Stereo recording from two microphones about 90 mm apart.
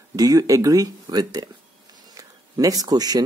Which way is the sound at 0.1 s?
40° right (ahead or behind).